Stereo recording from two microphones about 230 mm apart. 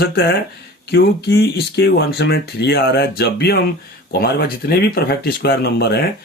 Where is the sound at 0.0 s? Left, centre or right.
Left.